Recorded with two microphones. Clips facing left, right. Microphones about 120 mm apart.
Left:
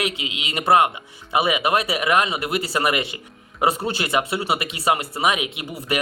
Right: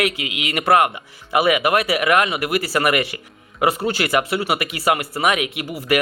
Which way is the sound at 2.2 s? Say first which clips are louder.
Right 3 dB; 25° left (ahead or behind).